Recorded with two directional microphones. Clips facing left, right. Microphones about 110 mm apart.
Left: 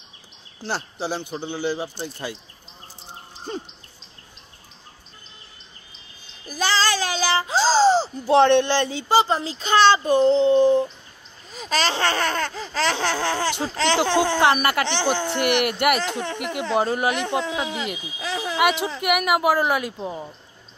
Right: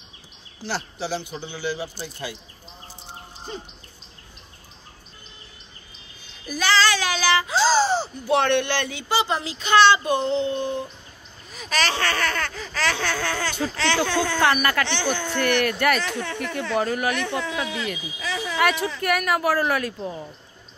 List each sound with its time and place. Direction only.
1.3 s speech: 45° left (ahead or behind)
1.6 s laughter: 25° left (ahead or behind)
6.5 s child singing: 35° left (ahead or behind)
8.3 s speech: 30° left (ahead or behind)
11.5 s laughter: 30° left (ahead or behind)
18.2 s a sound: 40° left (ahead or behind)
18.6 s laughter: 20° left (ahead or behind)
18.9 s speech: 15° left (ahead or behind)